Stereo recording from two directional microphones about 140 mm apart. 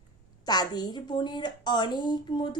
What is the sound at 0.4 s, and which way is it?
A woman's voice, 30° left (ahead or behind).